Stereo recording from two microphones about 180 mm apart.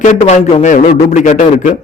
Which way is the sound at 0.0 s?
40° left (ahead or behind).